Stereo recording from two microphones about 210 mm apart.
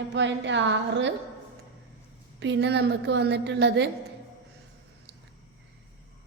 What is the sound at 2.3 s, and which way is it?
A woman's voice, 60° right (ahead or behind).